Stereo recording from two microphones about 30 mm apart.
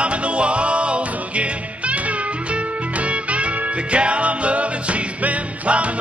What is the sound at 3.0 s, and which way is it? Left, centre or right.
Music, right.